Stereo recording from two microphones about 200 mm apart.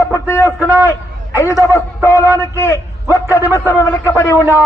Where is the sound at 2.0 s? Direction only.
15° left (ahead or behind).